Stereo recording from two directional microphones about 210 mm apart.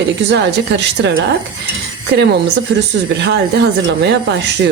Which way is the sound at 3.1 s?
55° right (ahead or behind).